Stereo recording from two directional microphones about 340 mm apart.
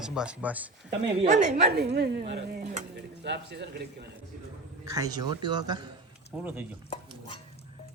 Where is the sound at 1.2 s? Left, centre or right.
Right.